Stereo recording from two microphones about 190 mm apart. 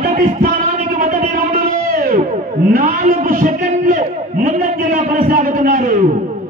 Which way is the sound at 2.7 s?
50° right (ahead or behind).